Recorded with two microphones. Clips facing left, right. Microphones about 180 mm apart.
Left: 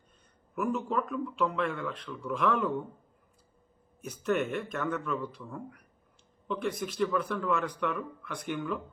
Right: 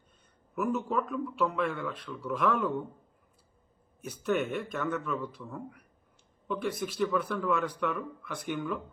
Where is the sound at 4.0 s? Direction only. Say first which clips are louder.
Even; 5° right (ahead or behind).